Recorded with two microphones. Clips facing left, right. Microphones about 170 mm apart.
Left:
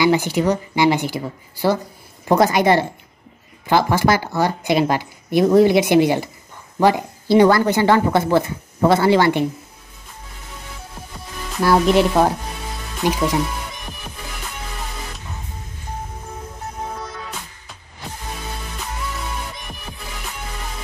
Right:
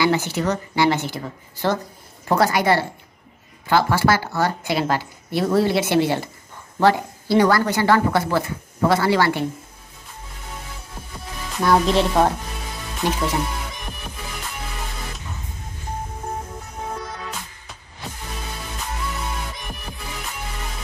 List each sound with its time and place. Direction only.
0.0 s a woman's voice: 15° left (ahead or behind)
11.6 s speech: 5° left (ahead or behind)
13.0 s speech: 15° left (ahead or behind)